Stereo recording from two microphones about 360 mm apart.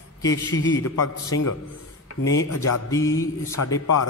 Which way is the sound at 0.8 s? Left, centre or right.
Left.